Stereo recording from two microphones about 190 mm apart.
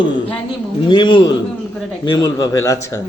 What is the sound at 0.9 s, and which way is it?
A man's voice, 25° left (ahead or behind).